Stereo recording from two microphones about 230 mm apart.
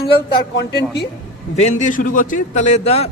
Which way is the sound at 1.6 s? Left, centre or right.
Left.